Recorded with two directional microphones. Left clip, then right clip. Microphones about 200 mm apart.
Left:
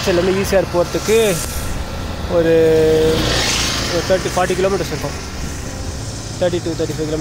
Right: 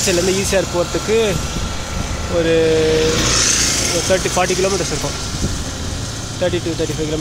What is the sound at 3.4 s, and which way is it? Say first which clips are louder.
Vehicle: right 1 dB; 55° right (ahead or behind).